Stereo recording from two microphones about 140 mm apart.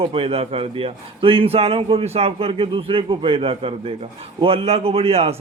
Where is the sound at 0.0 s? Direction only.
40° right (ahead or behind).